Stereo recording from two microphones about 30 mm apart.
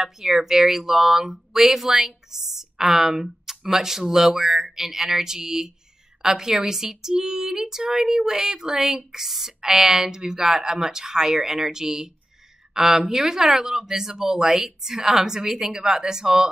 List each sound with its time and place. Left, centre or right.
0.0 s speech: centre